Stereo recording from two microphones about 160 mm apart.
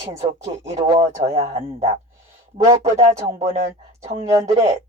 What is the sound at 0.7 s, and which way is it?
Speech, 35° right (ahead or behind).